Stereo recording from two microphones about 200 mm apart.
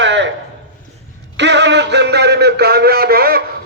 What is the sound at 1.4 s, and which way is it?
A man's voice, 60° right (ahead or behind).